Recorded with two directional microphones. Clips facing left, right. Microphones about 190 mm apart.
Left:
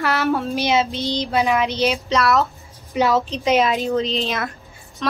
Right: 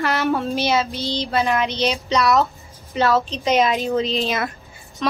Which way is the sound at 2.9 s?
15° left (ahead or behind).